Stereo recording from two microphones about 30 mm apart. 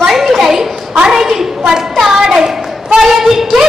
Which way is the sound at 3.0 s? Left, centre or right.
Centre.